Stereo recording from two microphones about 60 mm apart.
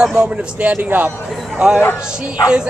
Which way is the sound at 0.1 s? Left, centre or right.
Right.